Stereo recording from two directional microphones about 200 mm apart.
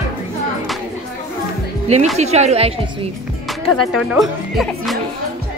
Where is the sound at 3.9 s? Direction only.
Centre (ahead or behind).